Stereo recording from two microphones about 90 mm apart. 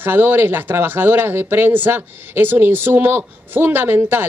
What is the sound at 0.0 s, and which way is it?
Speech, 20° right (ahead or behind).